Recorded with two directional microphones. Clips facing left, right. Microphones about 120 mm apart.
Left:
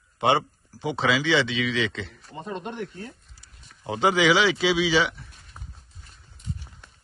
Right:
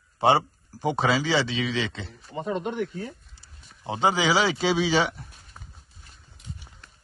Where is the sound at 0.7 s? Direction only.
45° right (ahead or behind).